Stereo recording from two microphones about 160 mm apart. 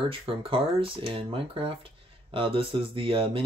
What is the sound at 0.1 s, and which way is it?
Speech, 35° right (ahead or behind).